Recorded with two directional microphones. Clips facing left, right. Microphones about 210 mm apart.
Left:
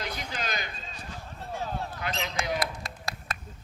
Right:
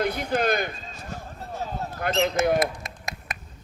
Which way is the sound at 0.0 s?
55° right (ahead or behind).